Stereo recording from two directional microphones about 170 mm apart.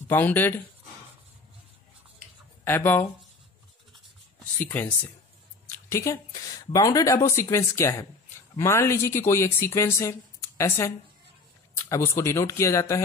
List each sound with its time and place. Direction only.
0.1 s speech: 10° left (ahead or behind)
2.6 s speech: 10° left (ahead or behind)
4.6 s a woman's voice: 10° left (ahead or behind)